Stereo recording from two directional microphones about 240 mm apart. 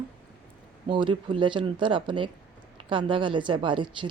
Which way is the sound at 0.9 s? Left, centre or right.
Centre.